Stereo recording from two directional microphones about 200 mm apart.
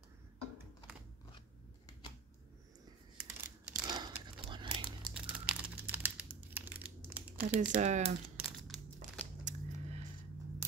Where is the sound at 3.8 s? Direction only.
20° right (ahead or behind).